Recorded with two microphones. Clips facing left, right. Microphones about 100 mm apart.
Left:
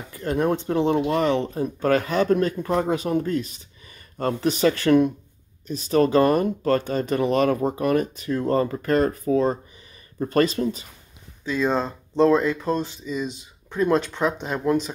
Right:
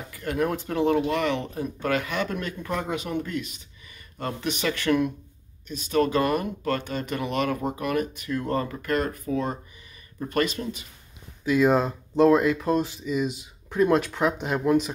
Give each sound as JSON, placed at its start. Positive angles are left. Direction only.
{"t": 0.1, "sound": "speech", "side_deg": 30}
{"t": 11.4, "sound": "speech", "side_deg": -10}